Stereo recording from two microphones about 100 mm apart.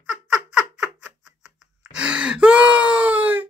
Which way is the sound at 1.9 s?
10° right (ahead or behind).